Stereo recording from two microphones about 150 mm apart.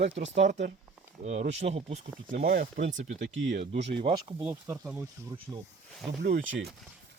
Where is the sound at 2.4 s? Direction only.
70° right (ahead or behind).